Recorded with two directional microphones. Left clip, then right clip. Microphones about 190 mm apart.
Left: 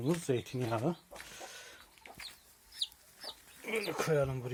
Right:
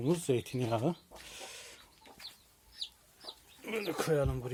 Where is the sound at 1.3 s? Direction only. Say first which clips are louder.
Right 1 dB; 15° right (ahead or behind).